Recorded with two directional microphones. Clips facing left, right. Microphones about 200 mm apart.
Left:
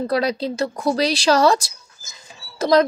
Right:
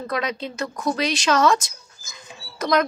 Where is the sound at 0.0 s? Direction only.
35° left (ahead or behind).